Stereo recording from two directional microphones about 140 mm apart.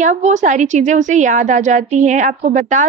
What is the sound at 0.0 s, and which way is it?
A woman's voice, 60° right (ahead or behind).